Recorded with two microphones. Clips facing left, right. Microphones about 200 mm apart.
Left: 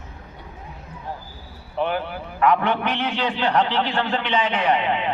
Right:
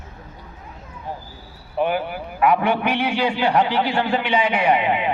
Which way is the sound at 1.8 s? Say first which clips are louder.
Right 3 dB; 10° right (ahead or behind).